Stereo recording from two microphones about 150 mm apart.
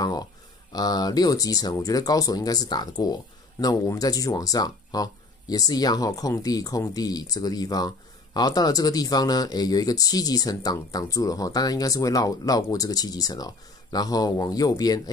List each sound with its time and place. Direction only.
0.7 s speech: 25° left (ahead or behind)